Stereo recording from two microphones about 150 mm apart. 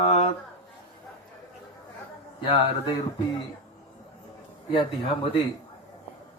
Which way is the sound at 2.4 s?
35° left (ahead or behind).